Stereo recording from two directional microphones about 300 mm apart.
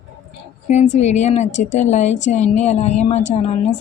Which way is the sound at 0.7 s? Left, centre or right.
Left.